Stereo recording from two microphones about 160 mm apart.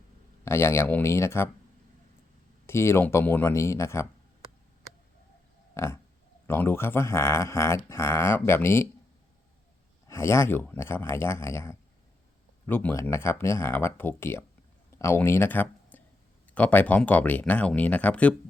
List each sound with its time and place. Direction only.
0.4 s speech: 15° left (ahead or behind)
2.6 s speech: 15° left (ahead or behind)
5.7 s pig: 15° left (ahead or behind)
6.5 s speech: 15° left (ahead or behind)
10.1 s speech: 15° left (ahead or behind)